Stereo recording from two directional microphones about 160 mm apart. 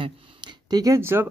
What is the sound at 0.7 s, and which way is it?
Speech, 20° right (ahead or behind).